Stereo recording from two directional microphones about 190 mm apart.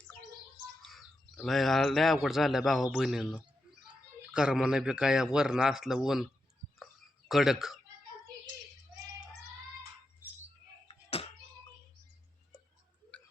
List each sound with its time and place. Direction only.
1.4 s a man's voice: centre (ahead or behind)
7.3 s a man's voice: centre (ahead or behind)
10.2 s bird: 10° right (ahead or behind)